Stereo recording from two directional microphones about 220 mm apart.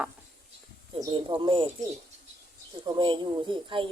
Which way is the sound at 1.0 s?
20° right (ahead or behind).